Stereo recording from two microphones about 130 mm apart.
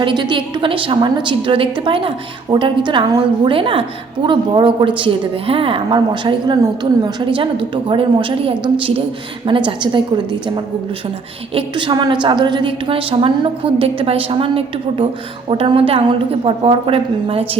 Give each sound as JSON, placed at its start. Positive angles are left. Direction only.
{"t": 0.0, "sound": "a woman's voice", "side_deg": -35}
{"t": 11.5, "sound": "a woman's voice", "side_deg": -40}